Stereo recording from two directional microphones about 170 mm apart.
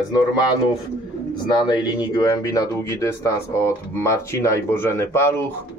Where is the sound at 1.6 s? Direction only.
25° left (ahead or behind).